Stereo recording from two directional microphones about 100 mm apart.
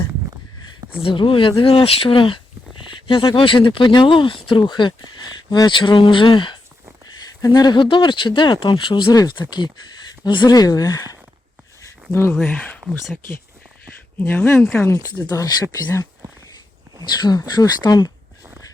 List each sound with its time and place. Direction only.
0.9 s speech: 60° left (ahead or behind)
7.2 s speech: 40° left (ahead or behind)
9.0 s speech: 35° left (ahead or behind)
9.3 s speech: 50° left (ahead or behind)
12.3 s speech: 5° left (ahead or behind)
13.8 s a sound: 15° left (ahead or behind)
14.9 s speech: 40° left (ahead or behind)
17.2 s speech: 40° left (ahead or behind)